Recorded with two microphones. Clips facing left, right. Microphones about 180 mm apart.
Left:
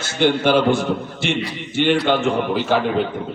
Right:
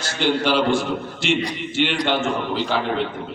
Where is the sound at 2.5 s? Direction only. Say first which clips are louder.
Left 4 dB; 50° left (ahead or behind).